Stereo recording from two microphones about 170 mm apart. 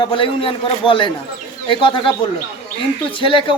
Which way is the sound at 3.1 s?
30° left (ahead or behind).